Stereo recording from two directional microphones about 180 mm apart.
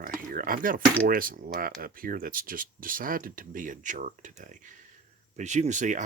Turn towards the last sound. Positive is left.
turn(degrees=-45)  # may be behind; listen again after turning